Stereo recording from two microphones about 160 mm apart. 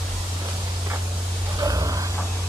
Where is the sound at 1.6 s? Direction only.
20° right (ahead or behind).